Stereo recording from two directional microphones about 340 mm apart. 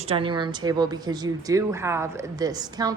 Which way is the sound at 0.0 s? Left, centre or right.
Centre.